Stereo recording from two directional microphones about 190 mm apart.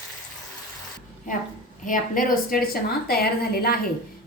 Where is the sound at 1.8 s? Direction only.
45° left (ahead or behind).